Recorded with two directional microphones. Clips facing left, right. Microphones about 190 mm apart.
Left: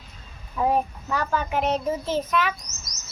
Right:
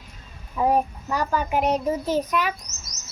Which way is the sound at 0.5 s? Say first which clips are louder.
Right 2 dB; 5° right (ahead or behind).